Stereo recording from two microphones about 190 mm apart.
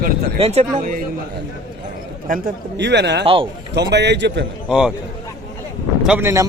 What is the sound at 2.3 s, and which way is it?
Speech, 50° right (ahead or behind).